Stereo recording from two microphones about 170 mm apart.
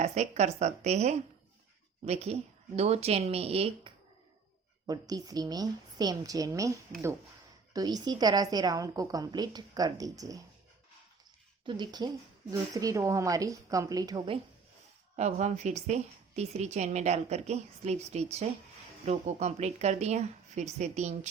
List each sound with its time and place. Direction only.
0.0 s a woman's voice: 40° right (ahead or behind)
4.9 s a woman's voice: 20° right (ahead or behind)
11.6 s a woman's voice: 25° right (ahead or behind)
15.1 s a woman's voice: 40° right (ahead or behind)